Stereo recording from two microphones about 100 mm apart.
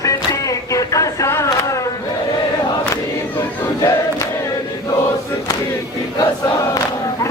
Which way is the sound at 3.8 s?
30° left (ahead or behind).